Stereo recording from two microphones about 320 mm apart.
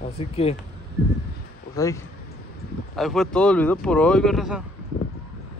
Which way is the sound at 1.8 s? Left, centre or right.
Centre.